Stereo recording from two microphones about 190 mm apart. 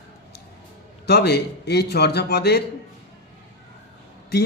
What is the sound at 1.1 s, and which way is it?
A man's voice, 60° left (ahead or behind).